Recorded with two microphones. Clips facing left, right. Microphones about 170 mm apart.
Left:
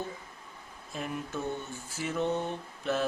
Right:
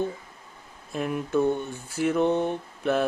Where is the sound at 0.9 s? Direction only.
60° right (ahead or behind).